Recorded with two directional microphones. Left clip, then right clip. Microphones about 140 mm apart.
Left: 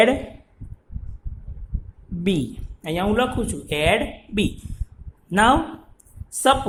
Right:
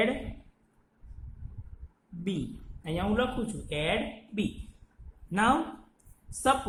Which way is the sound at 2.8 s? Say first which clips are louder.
Left 8 dB; 45° left (ahead or behind).